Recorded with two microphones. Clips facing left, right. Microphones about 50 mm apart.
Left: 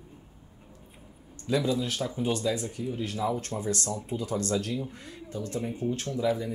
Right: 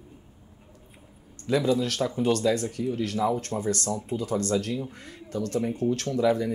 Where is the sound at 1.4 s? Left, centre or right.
Right.